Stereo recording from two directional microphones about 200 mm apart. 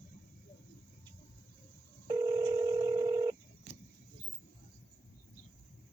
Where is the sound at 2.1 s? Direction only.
15° right (ahead or behind).